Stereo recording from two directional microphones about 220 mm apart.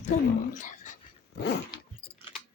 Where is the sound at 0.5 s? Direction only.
35° left (ahead or behind).